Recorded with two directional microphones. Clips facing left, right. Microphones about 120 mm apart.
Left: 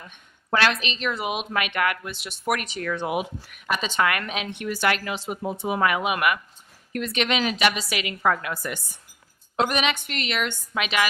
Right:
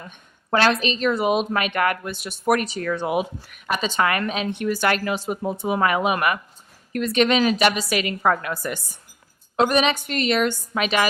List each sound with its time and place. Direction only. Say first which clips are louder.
0.0 s a woman's voice: right 4 dB; 35° right (ahead or behind)